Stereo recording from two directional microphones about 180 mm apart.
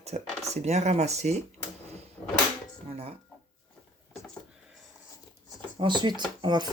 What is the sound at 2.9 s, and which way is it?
Chicken, 35° right (ahead or behind).